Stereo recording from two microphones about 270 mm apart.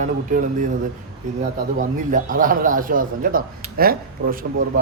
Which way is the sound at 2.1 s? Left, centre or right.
Right.